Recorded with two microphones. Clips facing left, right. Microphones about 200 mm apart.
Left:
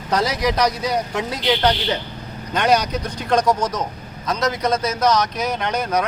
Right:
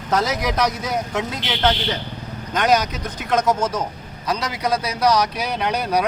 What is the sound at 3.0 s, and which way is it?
A man's voice, 5° right (ahead or behind).